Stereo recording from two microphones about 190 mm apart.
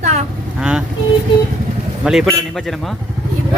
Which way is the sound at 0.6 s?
5° right (ahead or behind).